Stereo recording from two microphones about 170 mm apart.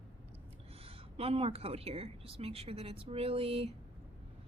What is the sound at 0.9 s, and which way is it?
A woman's voice, 35° right (ahead or behind).